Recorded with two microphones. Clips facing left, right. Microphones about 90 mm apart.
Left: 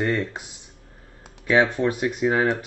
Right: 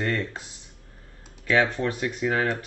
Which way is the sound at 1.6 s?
15° left (ahead or behind).